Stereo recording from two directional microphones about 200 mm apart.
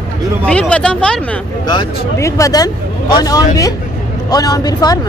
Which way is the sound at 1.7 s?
20° left (ahead or behind).